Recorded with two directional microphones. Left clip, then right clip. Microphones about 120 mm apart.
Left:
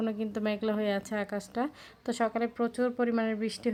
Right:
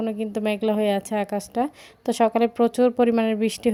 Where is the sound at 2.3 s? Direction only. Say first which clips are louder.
Right 11 dB; 45° right (ahead or behind).